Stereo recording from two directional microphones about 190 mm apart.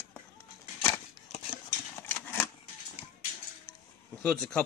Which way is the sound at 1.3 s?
30° left (ahead or behind).